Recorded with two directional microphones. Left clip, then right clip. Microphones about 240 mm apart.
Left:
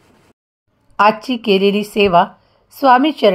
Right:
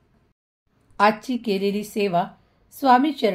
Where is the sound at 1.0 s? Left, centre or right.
Left.